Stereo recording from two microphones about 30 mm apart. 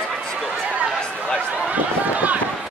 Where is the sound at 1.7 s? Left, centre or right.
Right.